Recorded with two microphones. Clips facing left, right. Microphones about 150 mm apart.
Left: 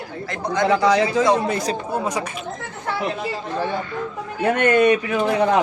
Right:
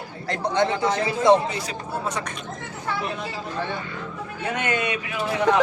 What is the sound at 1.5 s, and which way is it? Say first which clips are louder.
Speech: left 8 dB; 45° left (ahead or behind).